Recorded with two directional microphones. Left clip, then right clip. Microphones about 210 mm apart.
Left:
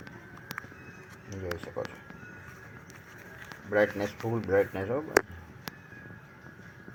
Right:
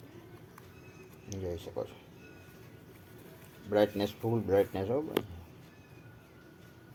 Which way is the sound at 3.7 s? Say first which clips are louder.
Left 2 dB; 10° right (ahead or behind).